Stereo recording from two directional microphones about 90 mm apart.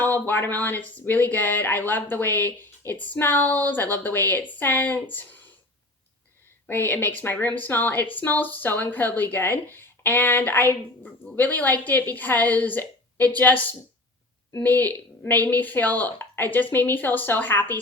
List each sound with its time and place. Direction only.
0.0 s speech: 20° left (ahead or behind)
6.7 s speech: 25° left (ahead or behind)